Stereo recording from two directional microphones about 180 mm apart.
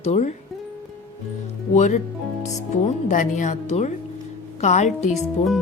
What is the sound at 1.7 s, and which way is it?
Speech, 40° left (ahead or behind).